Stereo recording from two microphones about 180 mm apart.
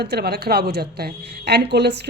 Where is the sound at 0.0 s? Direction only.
65° right (ahead or behind).